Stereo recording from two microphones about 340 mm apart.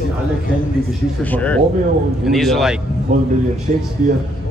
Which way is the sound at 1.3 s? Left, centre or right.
Centre.